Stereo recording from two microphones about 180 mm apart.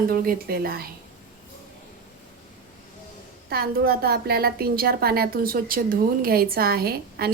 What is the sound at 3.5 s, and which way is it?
A woman's voice, 60° right (ahead or behind).